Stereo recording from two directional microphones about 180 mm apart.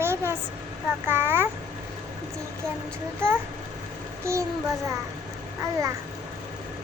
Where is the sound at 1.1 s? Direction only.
10° right (ahead or behind).